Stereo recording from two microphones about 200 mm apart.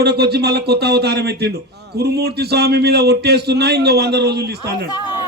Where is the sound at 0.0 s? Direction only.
55° right (ahead or behind).